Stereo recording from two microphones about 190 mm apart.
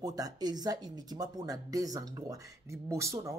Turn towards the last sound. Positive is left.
turn(degrees=-15)  # may be behind; listen again after turning